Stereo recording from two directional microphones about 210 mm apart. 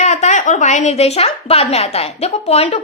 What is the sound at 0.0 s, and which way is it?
A woman's voice, 35° left (ahead or behind).